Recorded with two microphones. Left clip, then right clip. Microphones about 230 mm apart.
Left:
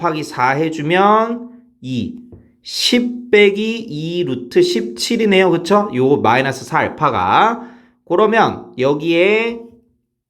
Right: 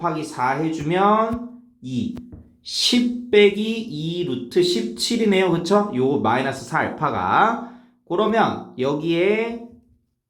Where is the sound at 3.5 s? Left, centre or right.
Left.